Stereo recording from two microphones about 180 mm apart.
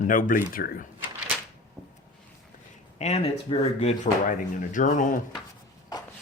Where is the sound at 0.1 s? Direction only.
50° left (ahead or behind).